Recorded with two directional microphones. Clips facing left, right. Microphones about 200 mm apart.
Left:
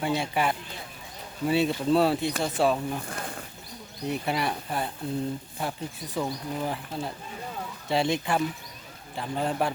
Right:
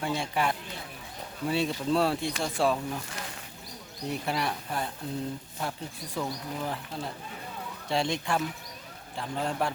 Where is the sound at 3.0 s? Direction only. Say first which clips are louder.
Left 5 dB; 55° left (ahead or behind).